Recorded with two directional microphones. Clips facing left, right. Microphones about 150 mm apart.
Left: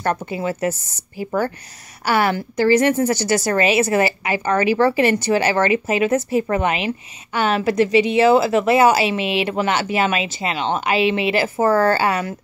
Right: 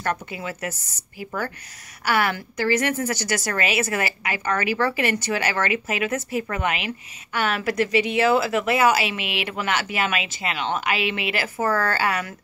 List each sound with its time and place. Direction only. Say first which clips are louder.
0.0 s a woman's voice: left 6 dB; 35° left (ahead or behind)